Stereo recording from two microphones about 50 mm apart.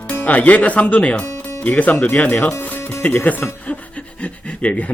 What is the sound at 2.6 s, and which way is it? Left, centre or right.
Speech, left.